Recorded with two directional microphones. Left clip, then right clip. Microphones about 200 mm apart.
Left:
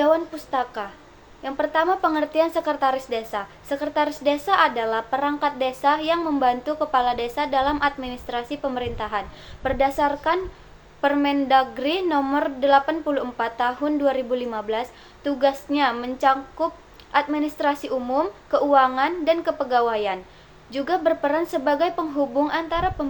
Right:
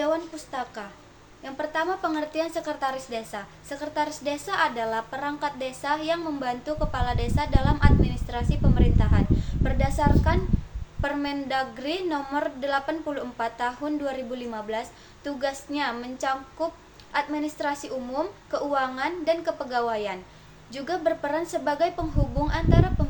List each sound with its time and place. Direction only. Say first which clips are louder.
0.0 s a woman's voice: left 7 dB; 5° right (ahead or behind)